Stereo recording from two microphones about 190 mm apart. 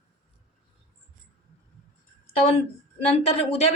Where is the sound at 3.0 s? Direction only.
35° left (ahead or behind).